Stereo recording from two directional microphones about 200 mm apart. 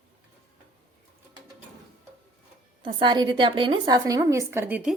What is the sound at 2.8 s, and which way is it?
A woman's voice, 25° right (ahead or behind).